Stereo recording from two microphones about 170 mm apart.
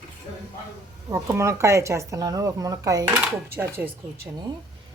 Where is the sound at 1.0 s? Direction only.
20° right (ahead or behind).